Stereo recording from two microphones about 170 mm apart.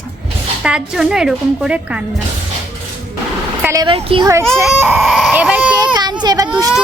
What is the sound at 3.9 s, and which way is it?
Speech, 30° right (ahead or behind).